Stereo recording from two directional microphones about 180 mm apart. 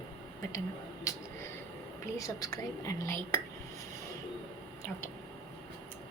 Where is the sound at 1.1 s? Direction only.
15° left (ahead or behind).